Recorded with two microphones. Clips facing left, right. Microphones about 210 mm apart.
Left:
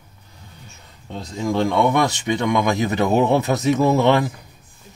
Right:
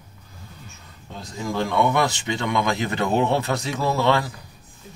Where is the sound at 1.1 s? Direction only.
25° left (ahead or behind).